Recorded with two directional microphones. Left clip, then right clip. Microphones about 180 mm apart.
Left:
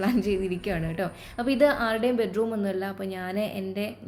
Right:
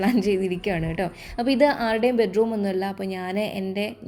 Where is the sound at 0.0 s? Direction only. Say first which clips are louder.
Right 4 dB; 35° right (ahead or behind).